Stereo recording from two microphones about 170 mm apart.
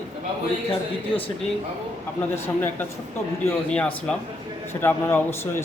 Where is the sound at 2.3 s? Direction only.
15° left (ahead or behind).